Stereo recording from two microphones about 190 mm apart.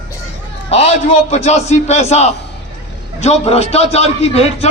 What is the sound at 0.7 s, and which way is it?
A man's voice, 35° left (ahead or behind).